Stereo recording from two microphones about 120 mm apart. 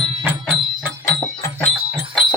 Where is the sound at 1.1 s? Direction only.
25° left (ahead or behind).